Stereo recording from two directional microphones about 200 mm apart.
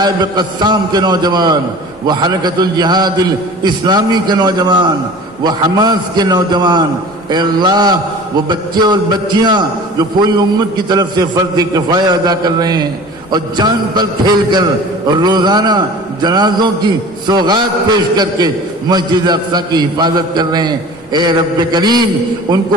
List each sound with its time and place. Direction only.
0.0 s a man's voice: 20° right (ahead or behind)